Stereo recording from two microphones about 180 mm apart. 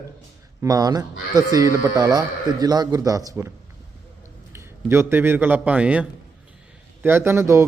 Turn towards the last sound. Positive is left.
turn(degrees=-15)  # may be behind; listen again after turning